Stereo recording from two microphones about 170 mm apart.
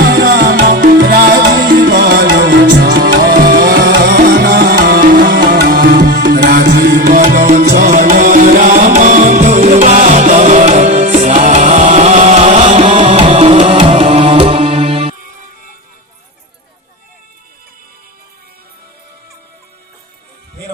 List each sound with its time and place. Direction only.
0.0 s music: 65° right (ahead or behind)
0.9 s music: 65° right (ahead or behind)
4.4 s tabla: 60° right (ahead or behind); by 15.1 s 35° right (ahead or behind)